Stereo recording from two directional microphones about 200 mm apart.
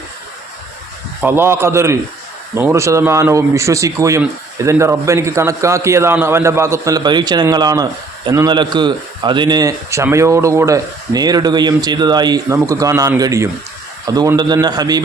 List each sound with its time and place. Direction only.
1.2 s a man's voice: 10° right (ahead or behind)